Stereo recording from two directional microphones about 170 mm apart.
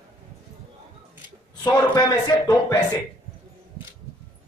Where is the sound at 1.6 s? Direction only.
25° left (ahead or behind).